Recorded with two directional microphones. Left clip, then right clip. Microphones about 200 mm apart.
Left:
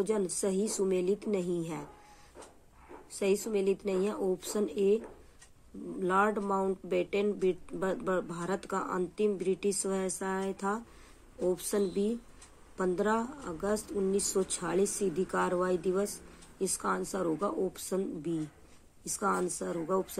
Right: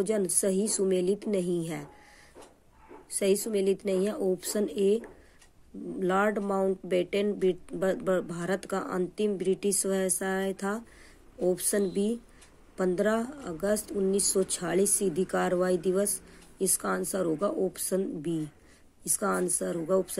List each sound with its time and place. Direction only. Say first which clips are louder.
0.0 s speech: right 3 dB; 25° right (ahead or behind)
3.1 s speech: right 3 dB; 25° right (ahead or behind)